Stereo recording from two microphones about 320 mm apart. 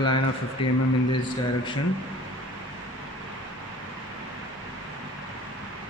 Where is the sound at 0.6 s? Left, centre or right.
Centre.